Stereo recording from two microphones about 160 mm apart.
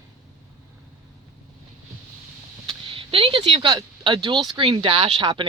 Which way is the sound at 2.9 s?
35° right (ahead or behind).